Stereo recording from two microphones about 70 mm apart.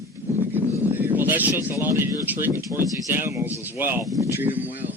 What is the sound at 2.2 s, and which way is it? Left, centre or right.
Speech, right.